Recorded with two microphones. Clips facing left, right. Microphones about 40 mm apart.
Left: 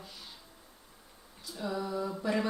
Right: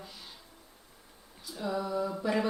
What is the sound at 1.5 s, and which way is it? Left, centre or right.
Speech, centre.